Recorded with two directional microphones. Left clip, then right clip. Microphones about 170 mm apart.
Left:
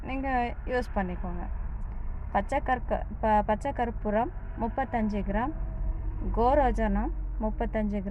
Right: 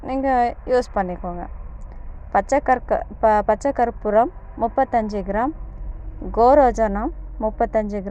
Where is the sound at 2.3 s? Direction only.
15° right (ahead or behind).